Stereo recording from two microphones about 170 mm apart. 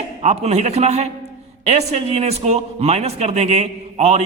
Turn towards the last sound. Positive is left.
turn(degrees=-40)  # may be behind; listen again after turning